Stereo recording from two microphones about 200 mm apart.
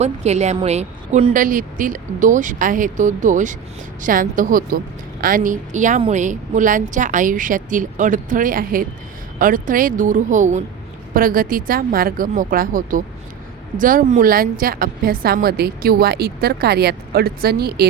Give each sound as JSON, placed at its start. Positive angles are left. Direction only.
{"t": 0.0, "sound": "a woman's voice", "side_deg": -35}